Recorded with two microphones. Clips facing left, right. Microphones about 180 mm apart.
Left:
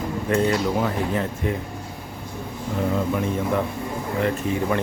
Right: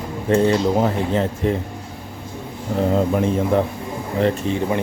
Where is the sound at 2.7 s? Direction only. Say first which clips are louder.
Right 5 dB; 35° right (ahead or behind).